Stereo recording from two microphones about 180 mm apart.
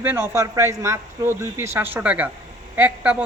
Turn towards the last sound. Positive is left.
turn(degrees=-5)  # may be behind; listen again after turning